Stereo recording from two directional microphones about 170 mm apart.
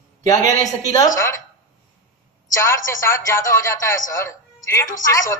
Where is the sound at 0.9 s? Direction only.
20° left (ahead or behind).